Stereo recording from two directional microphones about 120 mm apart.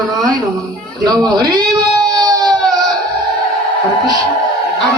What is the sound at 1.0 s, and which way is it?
Cat, 35° right (ahead or behind).